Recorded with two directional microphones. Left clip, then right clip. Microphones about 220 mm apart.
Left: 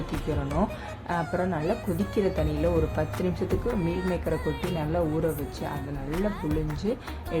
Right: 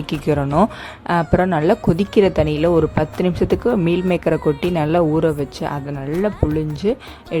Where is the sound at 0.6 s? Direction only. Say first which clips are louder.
Right 12 dB; 40° right (ahead or behind).